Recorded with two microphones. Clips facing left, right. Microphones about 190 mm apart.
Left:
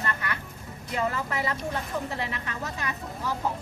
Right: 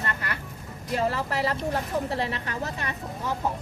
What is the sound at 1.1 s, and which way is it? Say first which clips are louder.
A woman's voice: right 3 dB; 35° right (ahead or behind).